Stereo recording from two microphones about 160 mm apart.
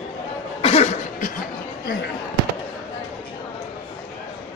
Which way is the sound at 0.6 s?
40° left (ahead or behind).